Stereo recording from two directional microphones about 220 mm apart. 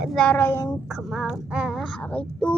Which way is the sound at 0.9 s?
Centre (ahead or behind).